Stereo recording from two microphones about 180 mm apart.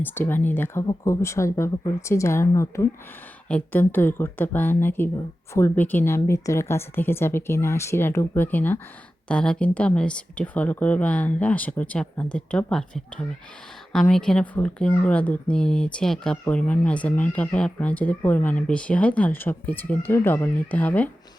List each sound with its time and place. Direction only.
0.0 s speech: 10° left (ahead or behind)